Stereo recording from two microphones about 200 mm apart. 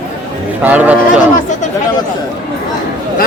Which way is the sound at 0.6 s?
10° right (ahead or behind).